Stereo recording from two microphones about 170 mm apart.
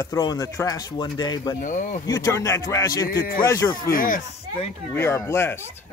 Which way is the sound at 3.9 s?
55° left (ahead or behind).